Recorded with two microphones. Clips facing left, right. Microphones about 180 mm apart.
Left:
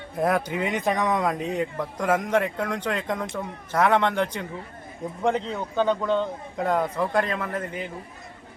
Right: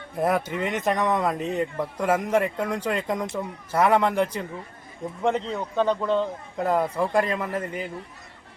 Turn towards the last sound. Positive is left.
turn(degrees=-5)  # may be behind; listen again after turning